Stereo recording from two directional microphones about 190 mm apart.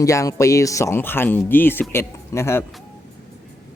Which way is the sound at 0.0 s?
15° left (ahead or behind).